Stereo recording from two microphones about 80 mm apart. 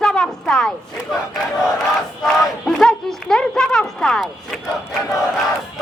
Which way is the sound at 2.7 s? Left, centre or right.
Centre.